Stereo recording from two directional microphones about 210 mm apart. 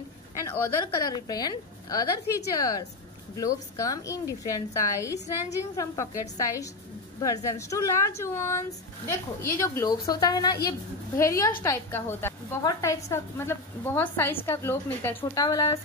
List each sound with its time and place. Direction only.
0.5 s a woman's voice: 15° left (ahead or behind)
3.7 s a woman's voice: 15° left (ahead or behind)